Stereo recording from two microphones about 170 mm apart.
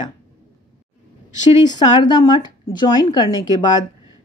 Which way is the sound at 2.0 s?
25° left (ahead or behind).